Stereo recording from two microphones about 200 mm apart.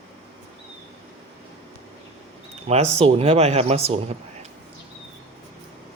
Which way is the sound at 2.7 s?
30° right (ahead or behind).